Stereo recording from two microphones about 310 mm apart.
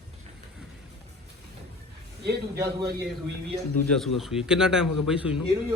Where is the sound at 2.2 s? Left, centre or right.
Right.